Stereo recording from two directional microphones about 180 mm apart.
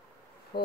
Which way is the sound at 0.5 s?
60° left (ahead or behind).